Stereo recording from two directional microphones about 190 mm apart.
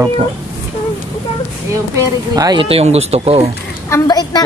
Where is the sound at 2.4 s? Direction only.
25° right (ahead or behind).